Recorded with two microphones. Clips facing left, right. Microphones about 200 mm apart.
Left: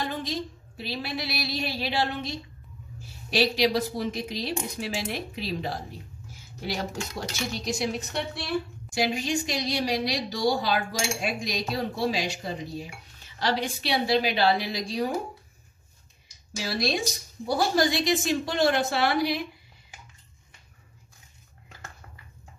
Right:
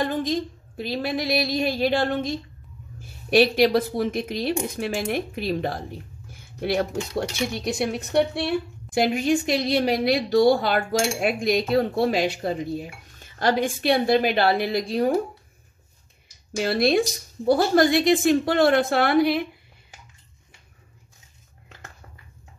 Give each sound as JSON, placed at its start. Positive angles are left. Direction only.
{"t": 0.0, "sound": "a woman's voice", "side_deg": -50}
{"t": 16.5, "sound": "a woman's voice", "side_deg": -60}